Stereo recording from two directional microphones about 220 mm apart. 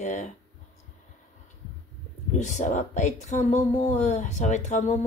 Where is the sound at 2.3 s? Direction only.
35° left (ahead or behind).